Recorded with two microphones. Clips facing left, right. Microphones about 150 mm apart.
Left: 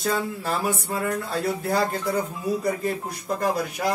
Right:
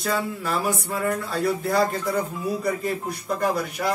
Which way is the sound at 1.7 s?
30° left (ahead or behind).